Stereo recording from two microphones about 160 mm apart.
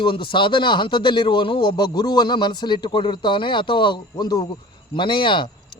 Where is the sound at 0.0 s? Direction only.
30° left (ahead or behind).